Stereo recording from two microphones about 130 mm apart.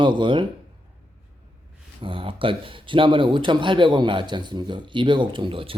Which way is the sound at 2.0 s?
40° right (ahead or behind).